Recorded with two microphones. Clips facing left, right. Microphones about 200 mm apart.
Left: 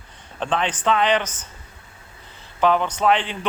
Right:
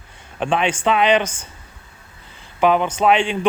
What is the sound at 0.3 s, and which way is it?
Speech, 10° right (ahead or behind).